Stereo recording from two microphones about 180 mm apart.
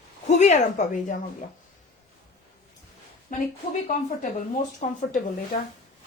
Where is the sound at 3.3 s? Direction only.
50° left (ahead or behind).